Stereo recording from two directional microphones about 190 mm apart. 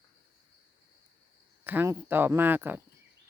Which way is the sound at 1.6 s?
10° right (ahead or behind).